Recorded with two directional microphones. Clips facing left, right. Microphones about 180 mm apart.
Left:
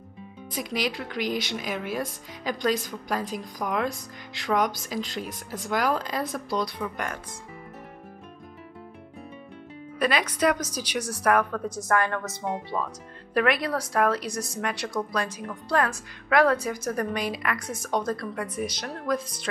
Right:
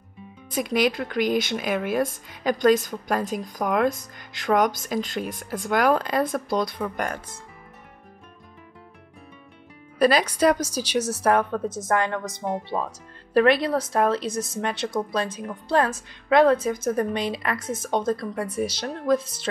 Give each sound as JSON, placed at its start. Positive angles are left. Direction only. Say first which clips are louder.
{"t": 0.6, "sound": "speech", "louder": "right 7 dB", "side_deg": -55}
{"t": 9.9, "sound": "a woman's voice", "louder": "right 6 dB", "side_deg": -35}
{"t": 12.4, "sound": "speech", "louder": "right 3 dB", "side_deg": -40}
{"t": 13.3, "sound": "a woman's voice", "louder": "right 5 dB", "side_deg": -30}